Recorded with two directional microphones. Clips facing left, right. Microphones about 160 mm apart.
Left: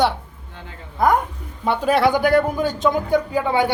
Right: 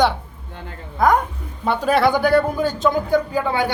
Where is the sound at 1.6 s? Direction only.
10° left (ahead or behind).